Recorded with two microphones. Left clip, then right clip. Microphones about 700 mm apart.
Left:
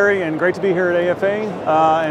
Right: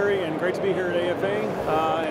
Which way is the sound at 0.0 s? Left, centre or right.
Left.